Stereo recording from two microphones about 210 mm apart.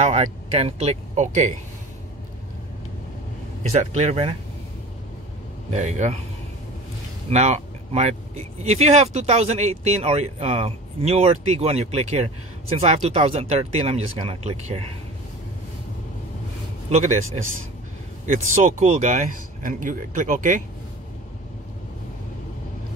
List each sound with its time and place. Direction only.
0.0 s speech: 30° right (ahead or behind)
3.7 s speech: 35° right (ahead or behind)
5.7 s speech: 35° right (ahead or behind)
7.2 s speech: 30° right (ahead or behind)
16.9 s speech: 35° right (ahead or behind)
18.2 s speech: 35° right (ahead or behind)